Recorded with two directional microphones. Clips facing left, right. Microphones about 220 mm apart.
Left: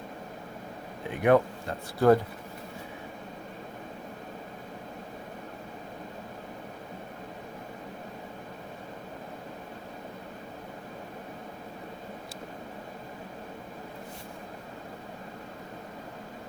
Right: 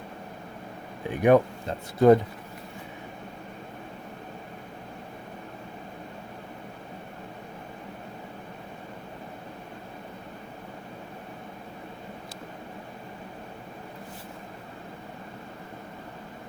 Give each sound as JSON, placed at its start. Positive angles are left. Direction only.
{"t": 1.1, "sound": "speech", "side_deg": -20}